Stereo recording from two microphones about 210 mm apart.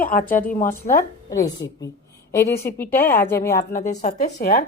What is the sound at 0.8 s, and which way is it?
Speech, 40° left (ahead or behind).